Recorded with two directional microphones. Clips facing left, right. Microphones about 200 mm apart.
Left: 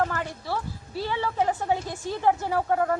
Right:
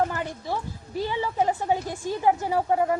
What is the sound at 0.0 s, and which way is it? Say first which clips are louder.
A woman's voice: right 1 dB; 15° right (ahead or behind).